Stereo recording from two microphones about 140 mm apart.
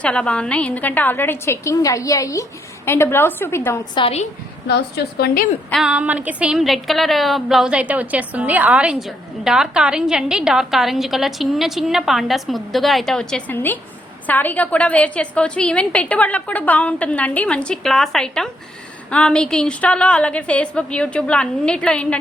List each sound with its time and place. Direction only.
0.0 s a woman's voice: 5° left (ahead or behind)
3.9 s a woman's voice: 40° left (ahead or behind)
5.1 s a woman's voice: 90° left
5.7 s a woman's voice: 5° right (ahead or behind)
13.5 s a woman's voice: 15° left (ahead or behind)